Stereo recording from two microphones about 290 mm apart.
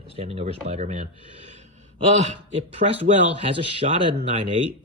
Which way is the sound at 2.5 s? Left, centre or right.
Right.